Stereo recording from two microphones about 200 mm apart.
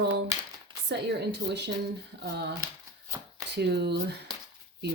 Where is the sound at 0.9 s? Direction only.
55° right (ahead or behind).